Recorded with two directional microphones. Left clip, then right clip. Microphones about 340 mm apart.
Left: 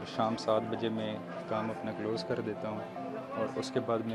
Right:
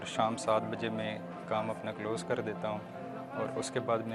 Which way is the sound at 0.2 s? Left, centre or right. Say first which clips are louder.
Even; right.